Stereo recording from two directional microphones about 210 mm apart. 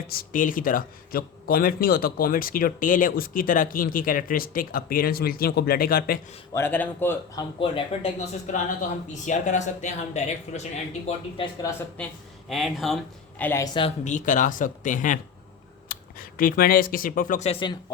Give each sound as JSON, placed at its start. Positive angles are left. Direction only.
{"t": 0.1, "sound": "a man's voice", "side_deg": 40}
{"t": 6.5, "sound": "speech", "side_deg": 10}
{"t": 7.6, "sound": "speech", "side_deg": 30}
{"t": 12.5, "sound": "speech", "side_deg": 0}
{"t": 13.4, "sound": "speech", "side_deg": 10}
{"t": 13.7, "sound": "speech", "side_deg": 30}